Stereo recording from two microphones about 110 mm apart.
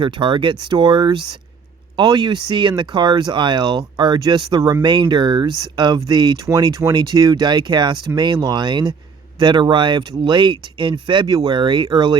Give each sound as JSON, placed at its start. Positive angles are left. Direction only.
{"t": 0.0, "sound": "speech", "side_deg": -45}
{"t": 6.4, "sound": "speech", "side_deg": -30}